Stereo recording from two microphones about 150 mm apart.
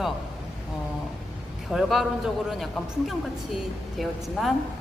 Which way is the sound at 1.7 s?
Centre (ahead or behind).